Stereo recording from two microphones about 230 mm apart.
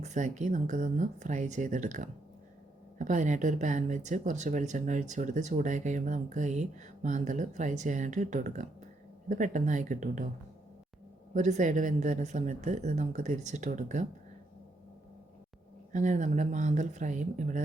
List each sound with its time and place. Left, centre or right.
0.0 s speech: right
11.3 s speech: right
15.9 s speech: right